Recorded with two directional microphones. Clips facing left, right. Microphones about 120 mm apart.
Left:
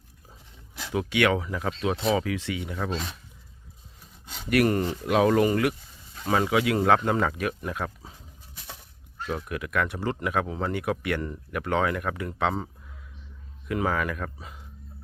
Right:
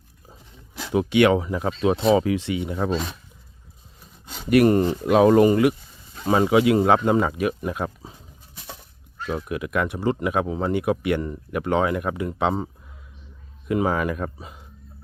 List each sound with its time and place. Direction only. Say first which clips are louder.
0.9 s speech: right 6 dB; 25° right (ahead or behind)
4.4 s speech: right 6 dB; 25° right (ahead or behind)
9.3 s speech: right 4 dB; 20° right (ahead or behind)